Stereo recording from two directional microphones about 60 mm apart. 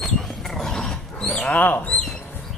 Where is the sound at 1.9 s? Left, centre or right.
Centre.